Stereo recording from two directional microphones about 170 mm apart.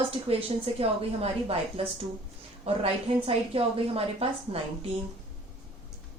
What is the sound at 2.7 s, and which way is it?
A woman's voice, 35° right (ahead or behind).